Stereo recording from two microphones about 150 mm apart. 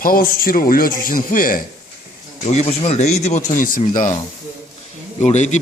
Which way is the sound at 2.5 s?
45° left (ahead or behind).